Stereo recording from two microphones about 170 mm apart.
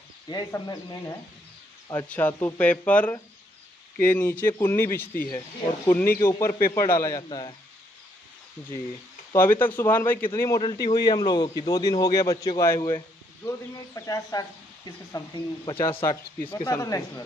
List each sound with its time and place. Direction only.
0.3 s a man's voice: 25° left (ahead or behind)
9.3 s a man's voice: 15° left (ahead or behind)
16.0 s a man's voice: 15° left (ahead or behind)